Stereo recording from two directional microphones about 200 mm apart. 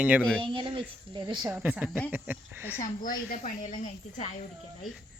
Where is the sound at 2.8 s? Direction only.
45° left (ahead or behind).